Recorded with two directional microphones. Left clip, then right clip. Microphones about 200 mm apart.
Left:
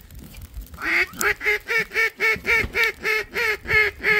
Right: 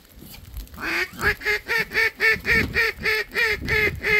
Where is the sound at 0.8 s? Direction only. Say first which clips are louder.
Left 2 dB; 45° left (ahead or behind).